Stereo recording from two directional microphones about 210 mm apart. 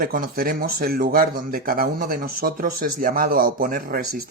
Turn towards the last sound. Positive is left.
turn(degrees=-45)  # may be behind; listen again after turning